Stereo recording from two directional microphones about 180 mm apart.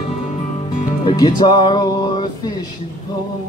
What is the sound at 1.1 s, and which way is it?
Music, 25° left (ahead or behind).